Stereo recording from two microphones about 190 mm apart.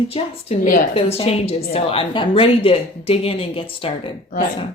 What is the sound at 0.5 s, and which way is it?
Speech, 35° left (ahead or behind).